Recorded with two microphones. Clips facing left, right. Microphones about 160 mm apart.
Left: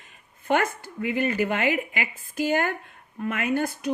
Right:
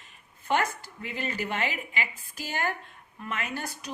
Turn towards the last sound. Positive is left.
turn(degrees=55)  # may be behind; listen again after turning